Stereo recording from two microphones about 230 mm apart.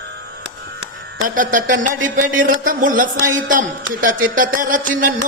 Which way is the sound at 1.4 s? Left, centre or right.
Right.